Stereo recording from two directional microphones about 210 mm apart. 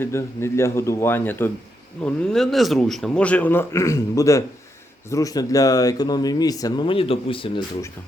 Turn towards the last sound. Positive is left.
turn(degrees=20)  # may be behind; listen again after turning